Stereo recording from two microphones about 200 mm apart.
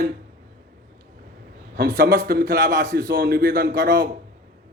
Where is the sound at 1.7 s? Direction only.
45° right (ahead or behind).